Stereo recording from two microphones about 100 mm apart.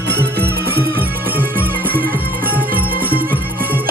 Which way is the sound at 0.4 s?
20° right (ahead or behind).